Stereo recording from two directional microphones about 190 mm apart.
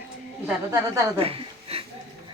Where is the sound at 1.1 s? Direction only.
30° right (ahead or behind).